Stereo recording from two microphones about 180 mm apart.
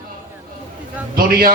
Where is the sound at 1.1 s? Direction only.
55° right (ahead or behind).